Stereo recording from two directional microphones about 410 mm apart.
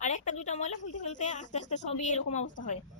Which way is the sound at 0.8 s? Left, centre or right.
Left.